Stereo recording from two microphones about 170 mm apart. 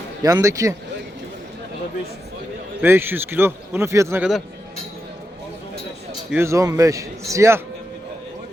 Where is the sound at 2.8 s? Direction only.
10° right (ahead or behind).